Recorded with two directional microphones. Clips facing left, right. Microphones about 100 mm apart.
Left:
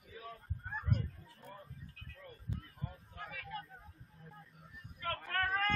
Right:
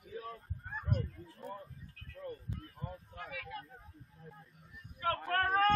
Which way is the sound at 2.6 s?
35° right (ahead or behind).